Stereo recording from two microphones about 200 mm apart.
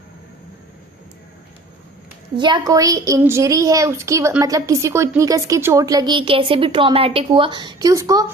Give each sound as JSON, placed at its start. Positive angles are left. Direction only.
{"t": 2.4, "sound": "a woman's voice", "side_deg": -20}